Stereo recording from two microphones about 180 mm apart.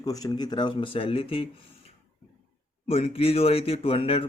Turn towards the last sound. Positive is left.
turn(degrees=30)  # may be behind; listen again after turning